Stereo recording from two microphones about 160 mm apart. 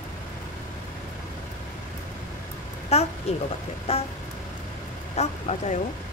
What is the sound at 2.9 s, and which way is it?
Speech, 40° left (ahead or behind).